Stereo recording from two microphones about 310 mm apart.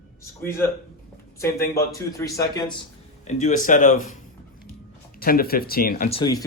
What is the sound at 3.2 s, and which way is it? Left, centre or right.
Speech, left.